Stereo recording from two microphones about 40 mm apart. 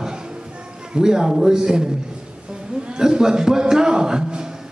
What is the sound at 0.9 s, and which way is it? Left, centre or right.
Speech, centre.